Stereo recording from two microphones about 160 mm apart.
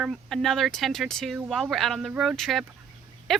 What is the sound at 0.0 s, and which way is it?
Speech, centre (ahead or behind).